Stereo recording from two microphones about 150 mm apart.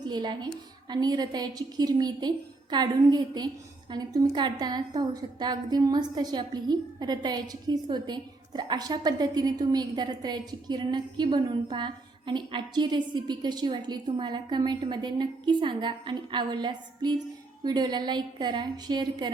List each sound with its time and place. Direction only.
0.0 s a woman's voice: 30° right (ahead or behind)